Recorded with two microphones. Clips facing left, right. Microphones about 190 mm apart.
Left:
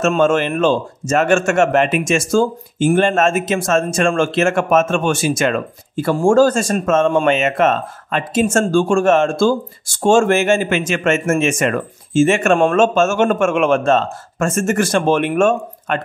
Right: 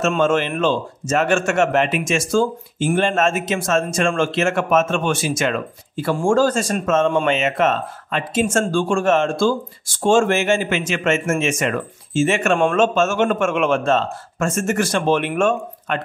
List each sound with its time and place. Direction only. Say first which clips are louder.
0.0 s speech: left 3 dB; 50° left (ahead or behind)